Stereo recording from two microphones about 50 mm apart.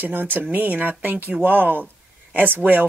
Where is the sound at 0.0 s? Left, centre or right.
Right.